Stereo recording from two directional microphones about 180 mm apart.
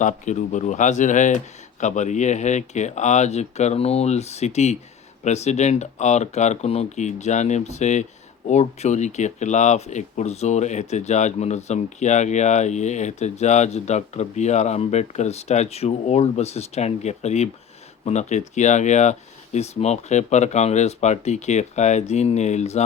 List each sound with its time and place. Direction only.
0.0 s speech: 45° left (ahead or behind)